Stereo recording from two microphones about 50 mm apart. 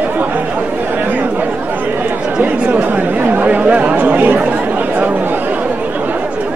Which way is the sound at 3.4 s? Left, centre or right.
Right.